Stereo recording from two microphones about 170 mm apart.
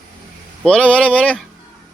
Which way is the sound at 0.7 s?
5° left (ahead or behind).